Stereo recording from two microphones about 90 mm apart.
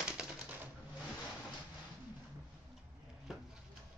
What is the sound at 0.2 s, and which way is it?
Typewriter, 10° right (ahead or behind).